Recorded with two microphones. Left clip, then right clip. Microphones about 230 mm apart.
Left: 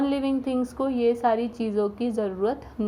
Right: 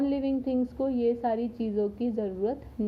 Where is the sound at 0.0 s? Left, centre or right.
Centre.